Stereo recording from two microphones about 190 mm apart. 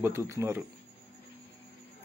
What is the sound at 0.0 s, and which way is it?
Speech, 15° right (ahead or behind).